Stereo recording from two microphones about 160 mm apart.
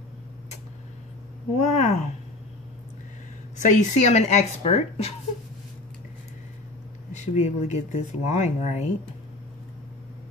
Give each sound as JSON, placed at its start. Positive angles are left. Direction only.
{"t": 1.6, "sound": "speech", "side_deg": 45}
{"t": 3.5, "sound": "speech", "side_deg": 45}
{"t": 7.1, "sound": "speech", "side_deg": 45}